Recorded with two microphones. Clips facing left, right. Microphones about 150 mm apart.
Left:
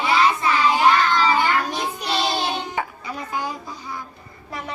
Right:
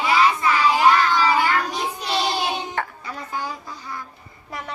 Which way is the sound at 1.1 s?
10° right (ahead or behind).